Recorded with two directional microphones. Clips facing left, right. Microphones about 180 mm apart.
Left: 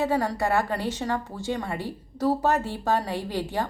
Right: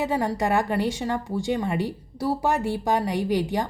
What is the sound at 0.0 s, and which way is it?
A woman's voice, 15° right (ahead or behind).